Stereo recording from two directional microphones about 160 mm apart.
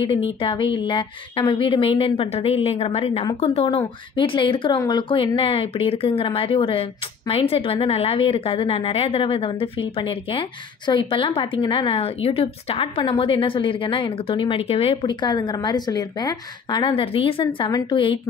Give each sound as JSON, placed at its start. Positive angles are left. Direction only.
{"t": 0.0, "sound": "a woman's voice", "side_deg": 35}